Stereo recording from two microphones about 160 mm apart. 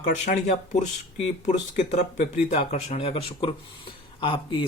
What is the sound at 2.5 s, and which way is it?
Speech, 40° left (ahead or behind).